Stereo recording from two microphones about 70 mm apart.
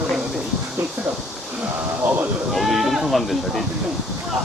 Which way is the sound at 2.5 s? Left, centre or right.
Centre.